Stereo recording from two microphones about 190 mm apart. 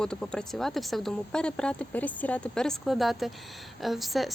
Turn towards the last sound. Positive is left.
turn(degrees=0)  # may be behind; listen again after turning